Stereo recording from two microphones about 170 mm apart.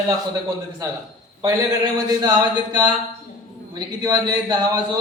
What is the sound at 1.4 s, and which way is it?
Speech, 25° right (ahead or behind).